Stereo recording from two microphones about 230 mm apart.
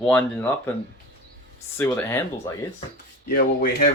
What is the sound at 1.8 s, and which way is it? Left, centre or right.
Speech, centre.